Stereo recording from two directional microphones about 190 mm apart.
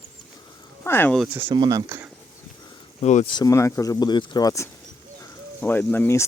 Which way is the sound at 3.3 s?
20° left (ahead or behind).